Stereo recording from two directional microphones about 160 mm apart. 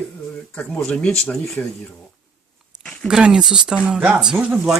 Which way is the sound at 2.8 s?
5° left (ahead or behind).